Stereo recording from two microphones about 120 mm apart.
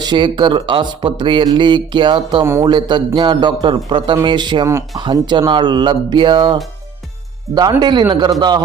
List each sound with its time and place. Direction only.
0.0 s a man's voice: 40° right (ahead or behind)
2.4 s a man's voice: 25° right (ahead or behind)
2.6 s a man's voice: 40° right (ahead or behind)